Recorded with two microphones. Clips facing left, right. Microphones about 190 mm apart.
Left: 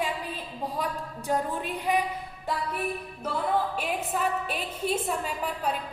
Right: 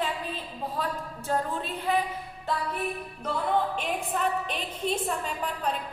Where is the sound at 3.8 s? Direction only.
5° left (ahead or behind).